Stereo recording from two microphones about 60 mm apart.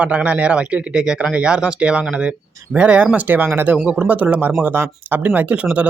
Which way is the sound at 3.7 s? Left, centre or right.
Right.